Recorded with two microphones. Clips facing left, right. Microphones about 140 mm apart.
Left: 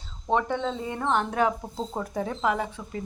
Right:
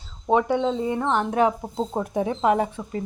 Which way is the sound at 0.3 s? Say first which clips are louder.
Right 5 dB; 10° right (ahead or behind).